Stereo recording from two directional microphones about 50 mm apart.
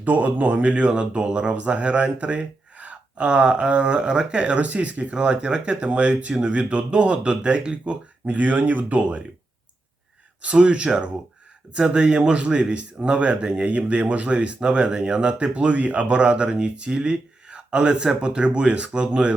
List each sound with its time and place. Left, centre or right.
0.0 s speech: right
5.1 s speech: centre
10.4 s speech: right